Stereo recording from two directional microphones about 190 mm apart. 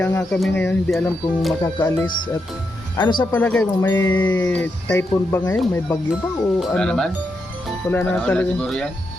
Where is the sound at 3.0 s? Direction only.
25° left (ahead or behind).